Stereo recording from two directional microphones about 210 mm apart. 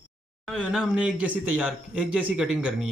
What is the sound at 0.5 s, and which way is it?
A man's voice, centre (ahead or behind).